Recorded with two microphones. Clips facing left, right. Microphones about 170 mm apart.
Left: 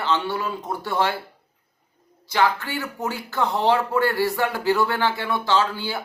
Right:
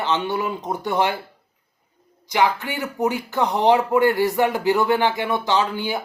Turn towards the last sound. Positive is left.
turn(degrees=-15)  # may be behind; listen again after turning